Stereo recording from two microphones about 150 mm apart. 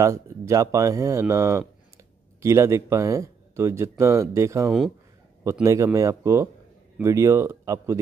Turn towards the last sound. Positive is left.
turn(degrees=-20)  # may be behind; listen again after turning